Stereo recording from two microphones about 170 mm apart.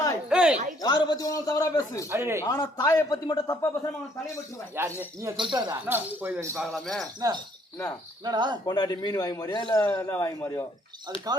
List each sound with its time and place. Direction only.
0.3 s a sound: 5° right (ahead or behind)
0.8 s a man's voice: 25° left (ahead or behind)
2.0 s speech: 15° right (ahead or behind)
2.4 s a man's voice: 20° left (ahead or behind)
4.7 s speech: 15° right (ahead or behind)
5.4 s speech: 25° right (ahead or behind)
5.7 s speech: 10° right (ahead or behind)
6.6 s speech: centre (ahead or behind)
7.0 s speech: 20° right (ahead or behind)
8.6 s a man's voice: 25° left (ahead or behind)
9.9 s a man's voice: 15° left (ahead or behind)